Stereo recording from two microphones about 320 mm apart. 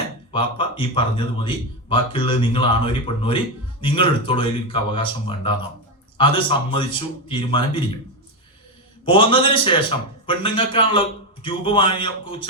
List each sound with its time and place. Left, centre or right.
0.3 s speech: centre
9.0 s speech: centre